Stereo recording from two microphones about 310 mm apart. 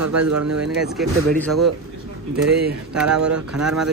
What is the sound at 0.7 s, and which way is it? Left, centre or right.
Speech, centre.